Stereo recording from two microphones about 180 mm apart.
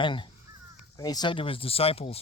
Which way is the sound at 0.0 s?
25° left (ahead or behind).